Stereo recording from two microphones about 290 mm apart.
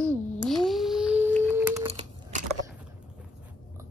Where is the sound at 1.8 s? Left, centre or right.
Right.